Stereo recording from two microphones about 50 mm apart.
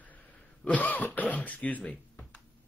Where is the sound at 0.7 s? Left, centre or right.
Left.